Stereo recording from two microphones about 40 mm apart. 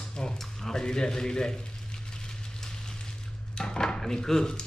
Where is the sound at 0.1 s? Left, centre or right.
Left.